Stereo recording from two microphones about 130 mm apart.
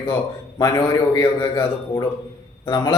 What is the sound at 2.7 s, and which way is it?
Speech, 30° left (ahead or behind).